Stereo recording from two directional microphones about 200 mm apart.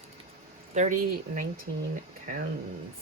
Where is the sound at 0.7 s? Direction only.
40° right (ahead or behind).